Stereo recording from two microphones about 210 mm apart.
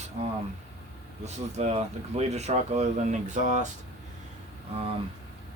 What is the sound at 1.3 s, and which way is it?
Speech, 30° right (ahead or behind).